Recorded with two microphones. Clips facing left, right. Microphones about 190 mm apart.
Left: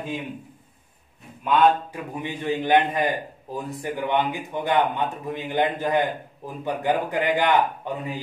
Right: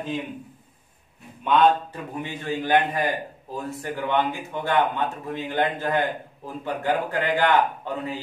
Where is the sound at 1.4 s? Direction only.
5° left (ahead or behind).